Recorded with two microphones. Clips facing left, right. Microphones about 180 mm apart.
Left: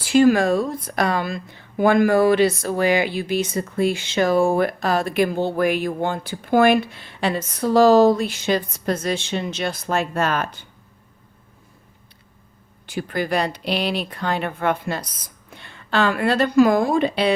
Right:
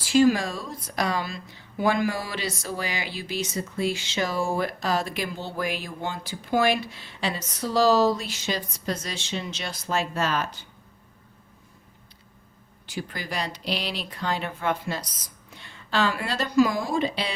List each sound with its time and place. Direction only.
0.0 s speech: 55° left (ahead or behind)
12.8 s speech: 55° left (ahead or behind)